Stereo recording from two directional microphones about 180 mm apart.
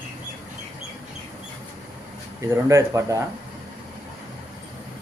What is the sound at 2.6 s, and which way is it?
Speech, 15° right (ahead or behind).